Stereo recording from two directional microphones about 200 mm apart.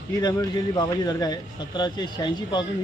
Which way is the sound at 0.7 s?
20° left (ahead or behind).